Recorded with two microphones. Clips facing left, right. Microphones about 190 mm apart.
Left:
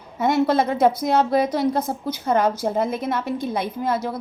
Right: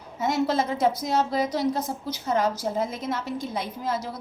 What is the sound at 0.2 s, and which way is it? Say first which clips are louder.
A woman's voice: left 5 dB; 60° left (ahead or behind).